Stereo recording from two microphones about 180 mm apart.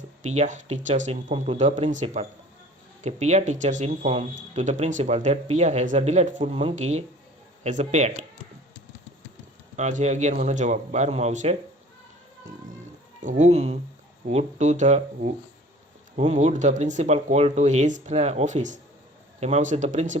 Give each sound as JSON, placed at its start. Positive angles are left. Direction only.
{"t": 0.2, "sound": "speech", "side_deg": -40}
{"t": 9.7, "sound": "speech", "side_deg": -40}
{"t": 13.2, "sound": "speech", "side_deg": -40}